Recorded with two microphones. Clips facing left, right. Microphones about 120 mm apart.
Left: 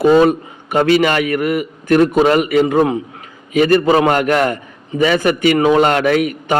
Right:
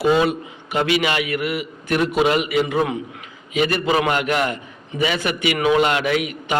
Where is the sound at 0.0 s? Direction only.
45° left (ahead or behind).